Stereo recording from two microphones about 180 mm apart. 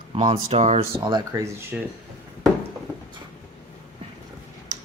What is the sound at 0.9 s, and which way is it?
Speech, 20° right (ahead or behind).